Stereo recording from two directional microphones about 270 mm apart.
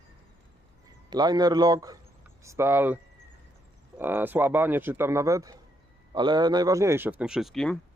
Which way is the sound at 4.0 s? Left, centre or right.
Centre.